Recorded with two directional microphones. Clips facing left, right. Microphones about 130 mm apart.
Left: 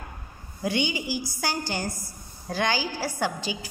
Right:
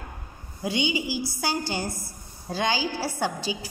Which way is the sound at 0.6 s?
15° right (ahead or behind).